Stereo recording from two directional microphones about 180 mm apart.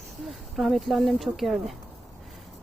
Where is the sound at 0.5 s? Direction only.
Centre (ahead or behind).